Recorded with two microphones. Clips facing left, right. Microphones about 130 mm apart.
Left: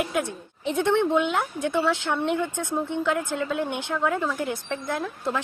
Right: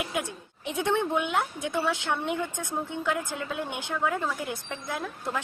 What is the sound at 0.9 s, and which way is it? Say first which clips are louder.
Speech: left 4 dB; 70° left (ahead or behind).